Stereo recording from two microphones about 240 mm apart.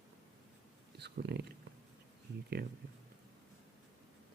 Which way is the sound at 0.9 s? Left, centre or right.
Right.